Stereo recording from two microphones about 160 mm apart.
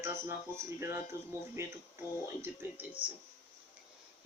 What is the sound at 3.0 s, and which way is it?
Speech, 30° right (ahead or behind).